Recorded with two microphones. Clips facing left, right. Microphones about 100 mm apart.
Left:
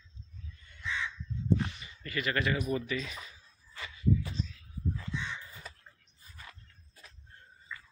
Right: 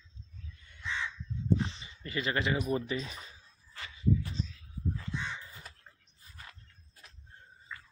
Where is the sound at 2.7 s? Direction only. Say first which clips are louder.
Right 1 dB; 30° right (ahead or behind).